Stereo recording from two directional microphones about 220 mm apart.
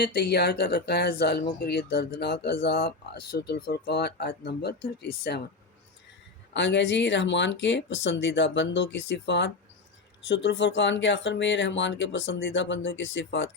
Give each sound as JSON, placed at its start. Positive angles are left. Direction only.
{"t": 0.0, "sound": "speech", "side_deg": 50}
{"t": 6.5, "sound": "speech", "side_deg": 55}